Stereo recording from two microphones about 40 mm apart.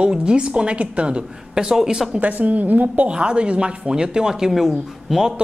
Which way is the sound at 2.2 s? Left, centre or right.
Right.